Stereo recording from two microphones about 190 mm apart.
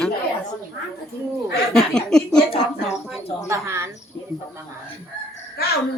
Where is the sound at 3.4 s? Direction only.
15° right (ahead or behind).